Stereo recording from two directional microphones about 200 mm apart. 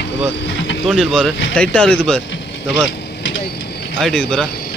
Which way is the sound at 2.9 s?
55° left (ahead or behind).